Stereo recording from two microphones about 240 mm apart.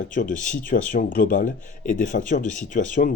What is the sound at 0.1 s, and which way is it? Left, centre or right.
Speech, left.